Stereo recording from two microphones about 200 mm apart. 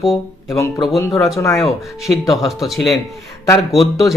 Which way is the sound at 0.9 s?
15° left (ahead or behind).